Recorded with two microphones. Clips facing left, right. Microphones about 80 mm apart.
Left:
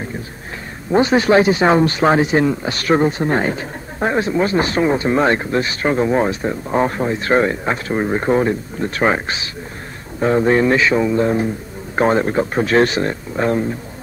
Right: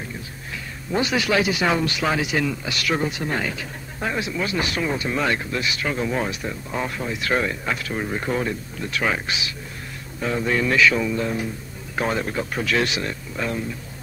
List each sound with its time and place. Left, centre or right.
0.9 s speech: left